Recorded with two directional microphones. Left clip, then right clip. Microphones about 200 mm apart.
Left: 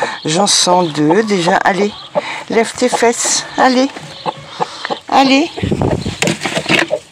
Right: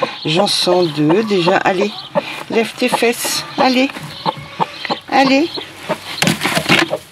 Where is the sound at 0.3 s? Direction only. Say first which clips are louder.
Left 2 dB; 35° left (ahead or behind).